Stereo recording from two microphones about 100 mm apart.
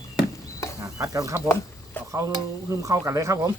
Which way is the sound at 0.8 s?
35° right (ahead or behind).